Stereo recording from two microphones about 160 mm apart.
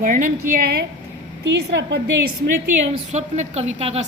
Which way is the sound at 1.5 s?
90° right.